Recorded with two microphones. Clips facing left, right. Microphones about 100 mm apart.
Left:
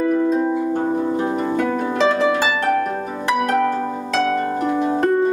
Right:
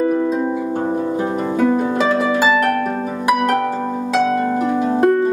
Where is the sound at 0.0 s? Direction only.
5° right (ahead or behind).